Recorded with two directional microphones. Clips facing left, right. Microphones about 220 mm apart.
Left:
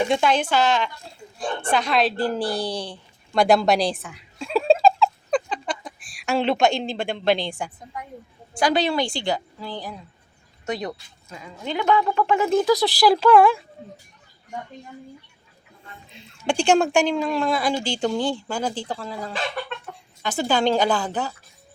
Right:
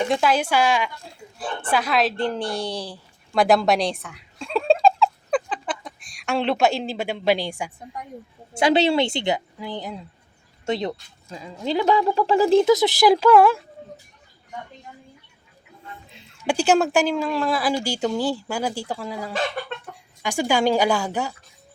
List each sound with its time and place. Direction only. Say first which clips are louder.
0.1 s speech: even; 5° right (ahead or behind)
2.2 s a sound: left 1 dB; 5° left (ahead or behind)
8.5 s a woman's voice: right 3 dB; 25° right (ahead or behind); by 13.6 s 5° right (ahead or behind)
16.5 s speech: even; 5° right (ahead or behind)